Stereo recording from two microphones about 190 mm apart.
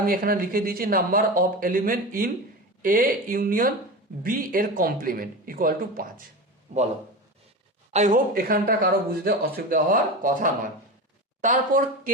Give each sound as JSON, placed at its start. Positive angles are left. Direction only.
{"t": 0.0, "sound": "speech", "side_deg": -50}
{"t": 7.9, "sound": "speech", "side_deg": -45}